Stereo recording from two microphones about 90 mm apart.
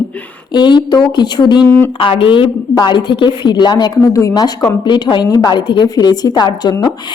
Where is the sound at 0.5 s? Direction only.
55° left (ahead or behind).